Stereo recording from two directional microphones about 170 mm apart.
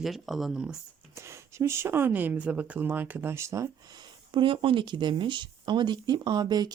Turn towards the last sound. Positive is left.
turn(degrees=-25)  # may be behind; listen again after turning